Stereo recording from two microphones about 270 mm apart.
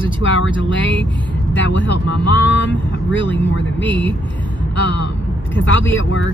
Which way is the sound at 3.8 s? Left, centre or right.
Centre.